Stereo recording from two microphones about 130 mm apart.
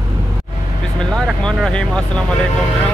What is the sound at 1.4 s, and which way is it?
Speech, 5° left (ahead or behind).